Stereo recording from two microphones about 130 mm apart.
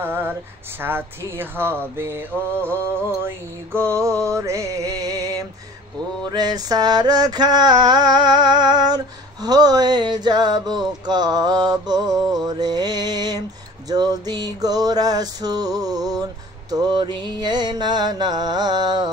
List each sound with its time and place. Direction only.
0.0 s female singing: 15° right (ahead or behind)
0.7 s mantra: 15° right (ahead or behind)
3.9 s music: 25° right (ahead or behind)
6.3 s mantra: 30° right (ahead or behind)
13.8 s music: 30° right (ahead or behind)
16.7 s mantra: 35° right (ahead or behind)